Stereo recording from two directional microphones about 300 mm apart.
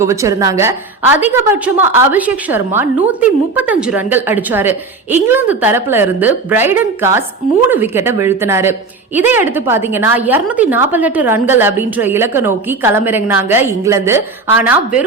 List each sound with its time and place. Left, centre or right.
0.0 s a woman's voice: centre